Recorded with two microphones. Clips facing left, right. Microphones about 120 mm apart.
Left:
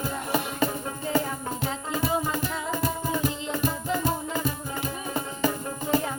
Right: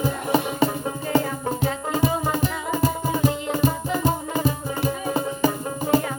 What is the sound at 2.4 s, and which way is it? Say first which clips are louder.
Music: right 5 dB; 20° right (ahead or behind).